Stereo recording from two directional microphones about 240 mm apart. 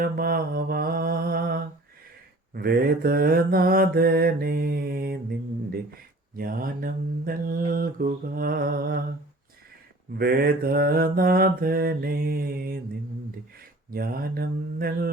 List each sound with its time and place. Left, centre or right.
0.0 s mantra: right
6.3 s mantra: right
10.2 s mantra: right
13.6 s speech: right